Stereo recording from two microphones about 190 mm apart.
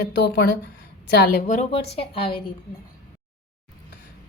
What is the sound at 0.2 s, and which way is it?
A woman's voice, 60° left (ahead or behind).